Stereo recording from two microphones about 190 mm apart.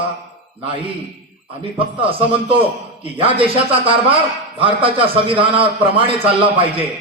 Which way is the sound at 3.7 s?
30° right (ahead or behind).